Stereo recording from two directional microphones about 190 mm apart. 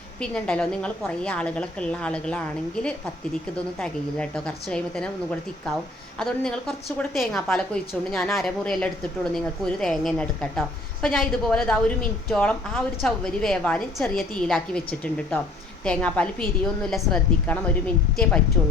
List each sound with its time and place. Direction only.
0.2 s a woman's voice: 5° left (ahead or behind)
3.8 s a woman's voice: 5° left (ahead or behind)